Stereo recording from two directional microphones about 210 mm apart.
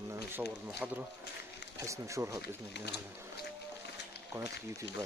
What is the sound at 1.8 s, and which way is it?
Speech, 15° right (ahead or behind).